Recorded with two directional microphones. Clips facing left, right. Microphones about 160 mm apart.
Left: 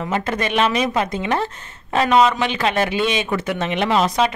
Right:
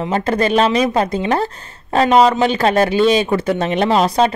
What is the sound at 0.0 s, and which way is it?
A woman's voice, 35° right (ahead or behind).